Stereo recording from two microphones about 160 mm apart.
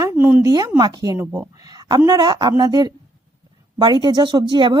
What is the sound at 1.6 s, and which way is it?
A woman's voice, 25° right (ahead or behind).